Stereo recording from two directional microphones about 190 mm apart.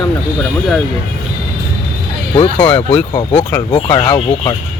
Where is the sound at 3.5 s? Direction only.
25° left (ahead or behind).